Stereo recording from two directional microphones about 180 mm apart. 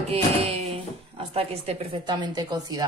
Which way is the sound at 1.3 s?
35° right (ahead or behind).